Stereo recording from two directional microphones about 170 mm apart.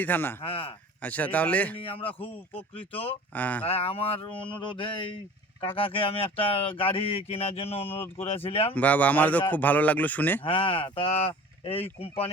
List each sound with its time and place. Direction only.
0.0 s speech: 10° left (ahead or behind)
0.4 s speech: 35° left (ahead or behind)
1.0 s speech: 10° left (ahead or behind)
1.8 s speech: 35° left (ahead or behind)
3.1 s speech: 10° left (ahead or behind)
3.7 s speech: 35° left (ahead or behind)
8.7 s speech: 10° left (ahead or behind)
10.4 s speech: 30° left (ahead or behind)